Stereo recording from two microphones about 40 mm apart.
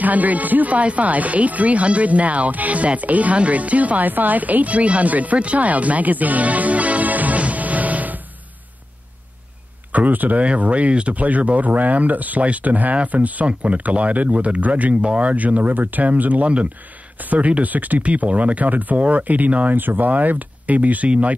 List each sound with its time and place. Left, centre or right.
0.0 s speech: right
9.9 s speech: right
10.4 s speech: right
19.7 s speech: right